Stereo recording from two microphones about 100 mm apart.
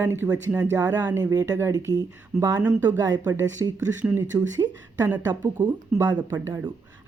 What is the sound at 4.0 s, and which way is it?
Speech, 20° right (ahead or behind).